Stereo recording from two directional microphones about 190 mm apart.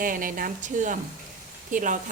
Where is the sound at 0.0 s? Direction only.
45° right (ahead or behind).